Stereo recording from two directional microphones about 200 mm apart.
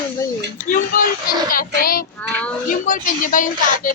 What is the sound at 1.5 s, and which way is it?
Speech, 45° left (ahead or behind).